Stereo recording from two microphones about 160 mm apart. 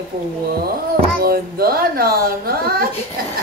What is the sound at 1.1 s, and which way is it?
Speech, 65° right (ahead or behind).